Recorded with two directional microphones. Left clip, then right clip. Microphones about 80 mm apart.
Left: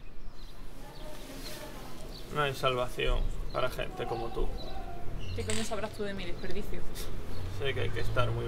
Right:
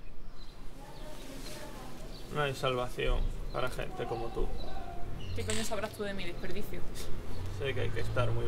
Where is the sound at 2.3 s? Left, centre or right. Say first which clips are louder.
Left 2 dB; left.